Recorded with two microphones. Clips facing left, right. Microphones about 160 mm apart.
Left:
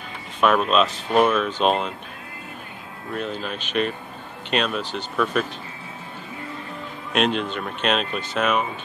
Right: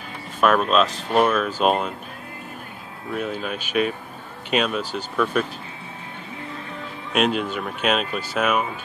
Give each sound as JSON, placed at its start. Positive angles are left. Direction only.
{"t": 0.4, "sound": "speech", "side_deg": 0}
{"t": 3.1, "sound": "speech", "side_deg": -5}
{"t": 7.1, "sound": "speech", "side_deg": -5}